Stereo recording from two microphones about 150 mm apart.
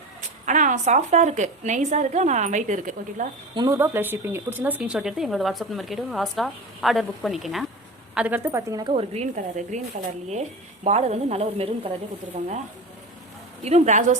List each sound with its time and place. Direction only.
0.4 s a woman's voice: 55° right (ahead or behind)
3.5 s speech: 30° right (ahead or behind)
3.8 s a woman's voice: 15° right (ahead or behind)
8.8 s a woman's voice: 40° right (ahead or behind)
10.8 s a woman's voice: 45° right (ahead or behind)
13.7 s a woman's voice: 50° right (ahead or behind)